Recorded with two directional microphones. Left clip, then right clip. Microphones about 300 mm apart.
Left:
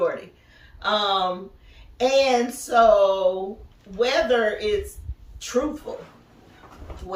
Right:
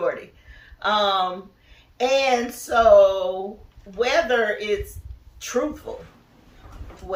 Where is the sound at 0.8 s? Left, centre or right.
Centre.